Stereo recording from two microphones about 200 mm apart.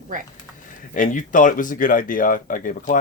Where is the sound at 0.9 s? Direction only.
40° left (ahead or behind).